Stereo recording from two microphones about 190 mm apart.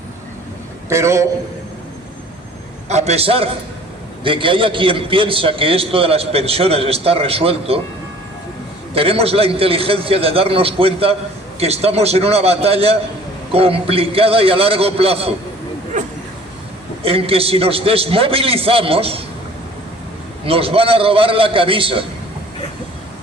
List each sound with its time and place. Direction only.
0.9 s a man's voice: 15° right (ahead or behind)
2.9 s a man's voice: 35° right (ahead or behind)
9.0 s a man's voice: 30° right (ahead or behind)
15.9 s vehicle: 40° right (ahead or behind)
17.0 s a man's voice: 30° right (ahead or behind)
20.4 s a man's voice: 30° right (ahead or behind)